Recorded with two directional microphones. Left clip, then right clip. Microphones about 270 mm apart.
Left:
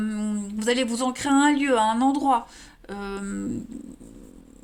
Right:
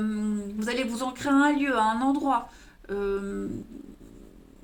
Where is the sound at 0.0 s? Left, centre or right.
Left.